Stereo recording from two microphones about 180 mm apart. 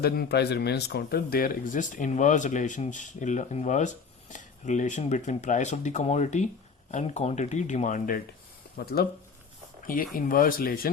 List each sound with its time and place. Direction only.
0.0 s speech: 65° left (ahead or behind); by 8.2 s 50° left (ahead or behind)
8.7 s speech: 60° left (ahead or behind)